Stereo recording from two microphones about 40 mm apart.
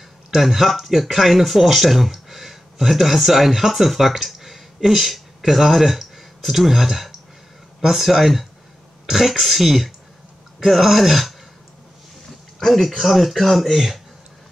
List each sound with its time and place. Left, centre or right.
0.3 s speech: centre
12.5 s speech: centre